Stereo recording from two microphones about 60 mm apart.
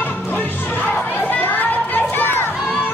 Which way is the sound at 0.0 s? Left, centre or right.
Left.